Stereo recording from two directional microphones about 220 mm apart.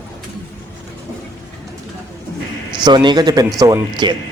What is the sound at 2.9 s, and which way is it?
Speech, 20° right (ahead or behind).